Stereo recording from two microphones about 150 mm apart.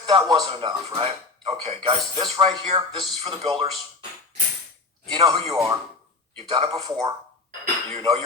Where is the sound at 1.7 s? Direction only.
35° right (ahead or behind).